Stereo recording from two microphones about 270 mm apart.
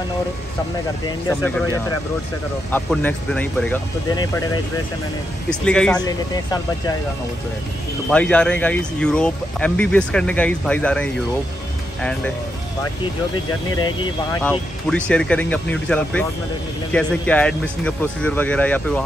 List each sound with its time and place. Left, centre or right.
1.0 s speech: centre
5.5 s speech: centre
5.9 s speech: centre
8.1 s speech: centre
13.7 s speech: centre
14.9 s speech: centre